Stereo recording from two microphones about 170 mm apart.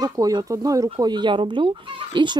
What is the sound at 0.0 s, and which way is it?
Speech, 20° right (ahead or behind).